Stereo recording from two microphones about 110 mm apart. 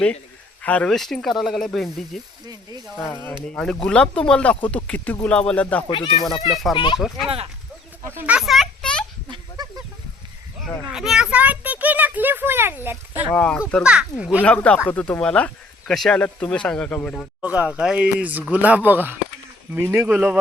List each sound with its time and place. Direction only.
0.6 s speech: 10° left (ahead or behind)
2.5 s speech: 35° right (ahead or behind)
3.0 s speech: 15° left (ahead or behind)
3.5 s speech: 5° left (ahead or behind)
5.9 s speech: 45° left (ahead or behind)
8.0 s a child's voice: 20° right (ahead or behind)
8.4 s a sound: centre (ahead or behind)
9.3 s a sound: 40° right (ahead or behind)
10.6 s speech: 5° right (ahead or behind); by 13.2 s 20° right (ahead or behind)
13.3 s speech: 10° left (ahead or behind)
13.8 s speech: 10° right (ahead or behind)
14.4 s speech: 10° left (ahead or behind)
17.4 s a child's voice: 15° right (ahead or behind)
20.0 s speech: 5° right (ahead or behind)